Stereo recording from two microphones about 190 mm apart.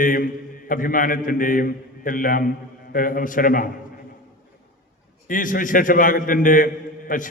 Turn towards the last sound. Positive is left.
turn(degrees=45)  # may be behind; listen again after turning